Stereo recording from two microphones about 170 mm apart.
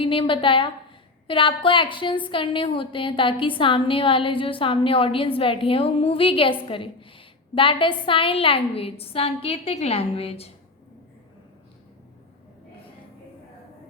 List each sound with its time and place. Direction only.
0.0 s a woman's voice: 30° left (ahead or behind)